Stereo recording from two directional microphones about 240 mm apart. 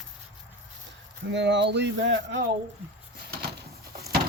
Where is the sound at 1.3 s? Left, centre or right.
Right.